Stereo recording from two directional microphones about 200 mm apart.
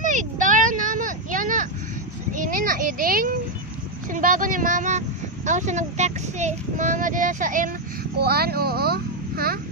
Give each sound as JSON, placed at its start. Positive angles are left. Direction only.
{"t": 0.0, "sound": "a sound", "side_deg": -40}
{"t": 4.1, "sound": "speech", "side_deg": -40}
{"t": 8.2, "sound": "a child's voice", "side_deg": -50}